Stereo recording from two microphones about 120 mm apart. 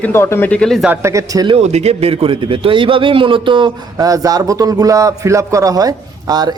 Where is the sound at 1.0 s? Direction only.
30° right (ahead or behind).